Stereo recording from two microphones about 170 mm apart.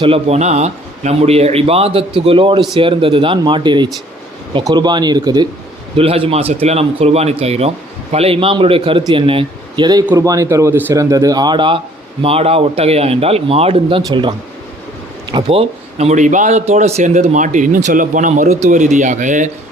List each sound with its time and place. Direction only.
0.0 s speech: 35° right (ahead or behind)
6.0 s a man's voice: 35° right (ahead or behind)